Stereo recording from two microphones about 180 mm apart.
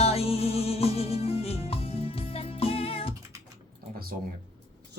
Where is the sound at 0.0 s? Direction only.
35° left (ahead or behind).